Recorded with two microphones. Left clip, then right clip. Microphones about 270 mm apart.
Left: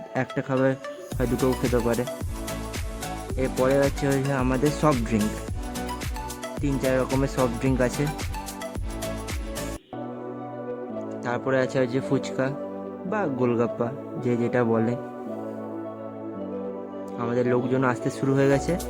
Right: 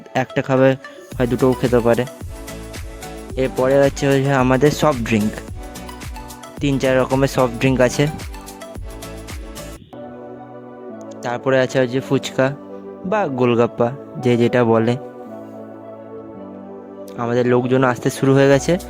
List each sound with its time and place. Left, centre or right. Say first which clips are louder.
0.1 s a man's voice: right 9 dB; right
3.6 s a man's voice: right 7 dB; right
6.6 s a man's voice: right 8 dB; right
11.2 s a man's voice: right 8 dB; right
17.2 s a man's voice: right 7 dB; right